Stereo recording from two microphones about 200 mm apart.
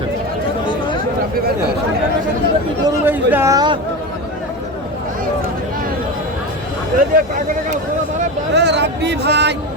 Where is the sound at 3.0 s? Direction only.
10° right (ahead or behind).